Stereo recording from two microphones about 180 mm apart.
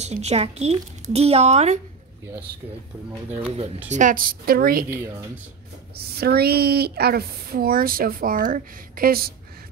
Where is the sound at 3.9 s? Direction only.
45° right (ahead or behind).